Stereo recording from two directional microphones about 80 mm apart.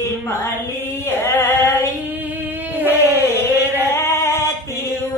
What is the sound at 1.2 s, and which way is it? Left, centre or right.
Female singing, left.